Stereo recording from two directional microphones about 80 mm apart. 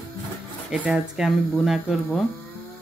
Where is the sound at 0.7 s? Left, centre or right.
Centre.